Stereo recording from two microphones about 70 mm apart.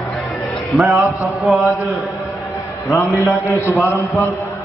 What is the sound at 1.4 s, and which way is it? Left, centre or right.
Chant, centre.